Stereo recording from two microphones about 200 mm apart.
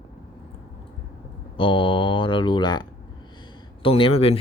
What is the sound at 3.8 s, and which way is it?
Speech, 25° left (ahead or behind).